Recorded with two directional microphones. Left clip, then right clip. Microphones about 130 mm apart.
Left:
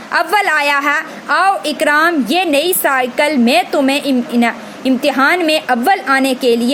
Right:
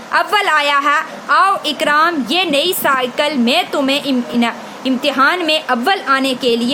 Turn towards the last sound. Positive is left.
turn(degrees=20)  # may be behind; listen again after turning